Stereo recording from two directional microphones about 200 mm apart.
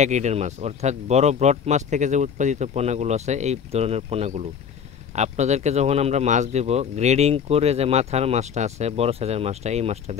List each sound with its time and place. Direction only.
0.0 s speech: 35° right (ahead or behind)